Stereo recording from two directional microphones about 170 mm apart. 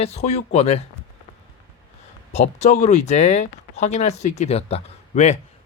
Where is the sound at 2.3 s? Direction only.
40° left (ahead or behind).